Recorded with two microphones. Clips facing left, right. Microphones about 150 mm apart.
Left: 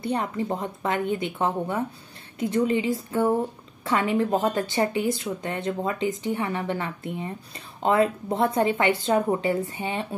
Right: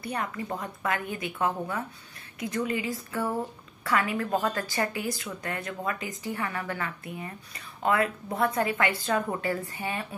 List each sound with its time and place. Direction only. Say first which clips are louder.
0.0 s a woman's voice: left 6 dB; 25° left (ahead or behind)